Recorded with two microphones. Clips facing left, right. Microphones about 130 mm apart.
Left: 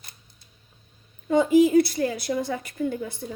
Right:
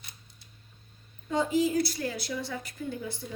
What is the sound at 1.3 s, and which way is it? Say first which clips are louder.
A woman's voice: left 9 dB; 60° left (ahead or behind).